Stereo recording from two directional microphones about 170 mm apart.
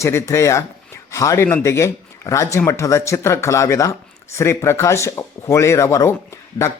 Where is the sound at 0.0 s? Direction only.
15° left (ahead or behind).